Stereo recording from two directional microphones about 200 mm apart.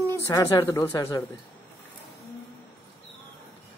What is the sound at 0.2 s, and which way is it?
Speech, 15° left (ahead or behind).